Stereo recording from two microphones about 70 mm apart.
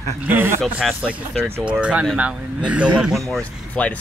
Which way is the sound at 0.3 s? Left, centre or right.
Right.